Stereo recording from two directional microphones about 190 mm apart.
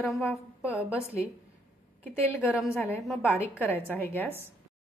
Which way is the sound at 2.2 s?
10° left (ahead or behind).